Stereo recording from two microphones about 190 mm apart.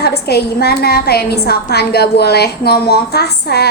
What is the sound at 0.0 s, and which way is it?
A woman's voice, 55° left (ahead or behind).